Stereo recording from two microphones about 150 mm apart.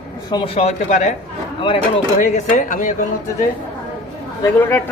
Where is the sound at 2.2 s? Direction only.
55° left (ahead or behind).